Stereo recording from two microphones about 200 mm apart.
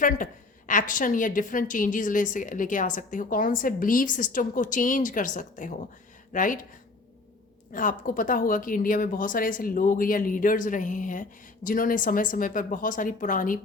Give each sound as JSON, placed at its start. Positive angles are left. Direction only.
{"t": 0.7, "sound": "a woman's voice", "side_deg": 40}
{"t": 7.7, "sound": "speech", "side_deg": 40}